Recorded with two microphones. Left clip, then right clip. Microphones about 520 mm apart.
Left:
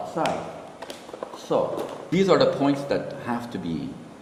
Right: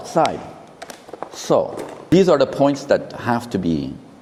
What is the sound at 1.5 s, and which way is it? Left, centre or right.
Speech, right.